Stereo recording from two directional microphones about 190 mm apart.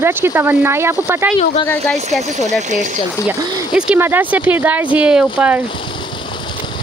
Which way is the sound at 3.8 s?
10° right (ahead or behind).